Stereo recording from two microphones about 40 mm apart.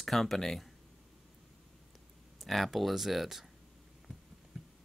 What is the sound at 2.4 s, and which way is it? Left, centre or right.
Speech, centre.